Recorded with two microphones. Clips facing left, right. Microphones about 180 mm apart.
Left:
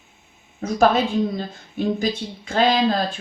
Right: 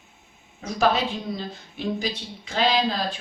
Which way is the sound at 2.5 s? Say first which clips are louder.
Left 5 dB; 50° left (ahead or behind).